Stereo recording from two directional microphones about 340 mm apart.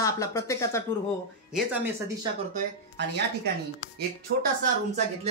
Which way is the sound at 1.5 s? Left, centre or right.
Centre.